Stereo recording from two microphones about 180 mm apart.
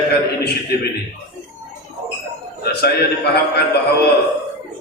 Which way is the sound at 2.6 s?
60° left (ahead or behind).